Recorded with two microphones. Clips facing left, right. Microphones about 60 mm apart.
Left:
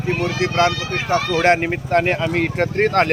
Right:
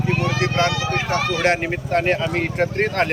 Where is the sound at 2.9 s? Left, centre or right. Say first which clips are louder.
Left 4 dB; left.